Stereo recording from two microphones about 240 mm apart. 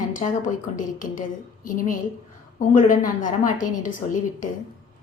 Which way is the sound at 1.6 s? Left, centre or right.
Left.